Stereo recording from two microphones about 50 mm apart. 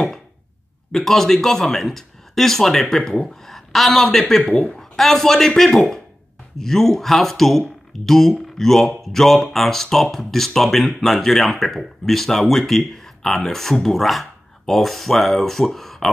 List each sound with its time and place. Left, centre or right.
0.9 s speech: centre
4.4 s speech: left
4.7 s speech: centre